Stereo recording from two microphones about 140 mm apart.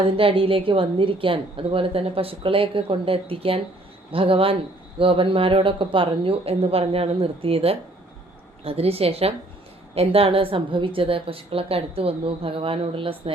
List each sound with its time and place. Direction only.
0.2 s a woman's voice: 40° right (ahead or behind)